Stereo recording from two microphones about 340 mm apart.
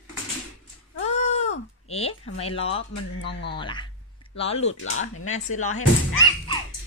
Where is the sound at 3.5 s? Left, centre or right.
Centre.